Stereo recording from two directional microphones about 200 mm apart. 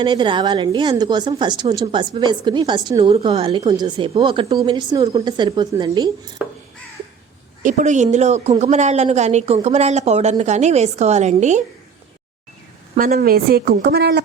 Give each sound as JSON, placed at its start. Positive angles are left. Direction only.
{"t": 0.0, "sound": "a woman's voice", "side_deg": -25}
{"t": 6.4, "sound": "crow", "side_deg": -5}
{"t": 7.6, "sound": "a woman's voice", "side_deg": -40}
{"t": 13.1, "sound": "speech", "side_deg": -50}